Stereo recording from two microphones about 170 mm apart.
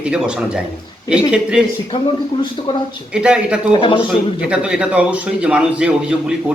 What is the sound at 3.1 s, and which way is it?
Speech, 5° right (ahead or behind).